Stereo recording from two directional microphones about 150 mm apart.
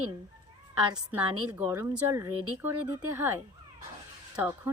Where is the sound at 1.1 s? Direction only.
10° right (ahead or behind).